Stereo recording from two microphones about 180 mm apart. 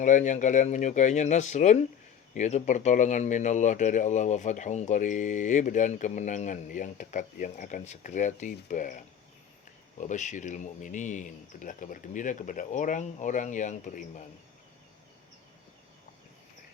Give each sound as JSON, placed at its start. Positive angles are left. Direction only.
{"t": 0.0, "sound": "speech", "side_deg": 45}